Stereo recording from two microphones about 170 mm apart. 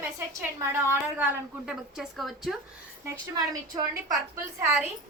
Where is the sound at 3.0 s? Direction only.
20° right (ahead or behind).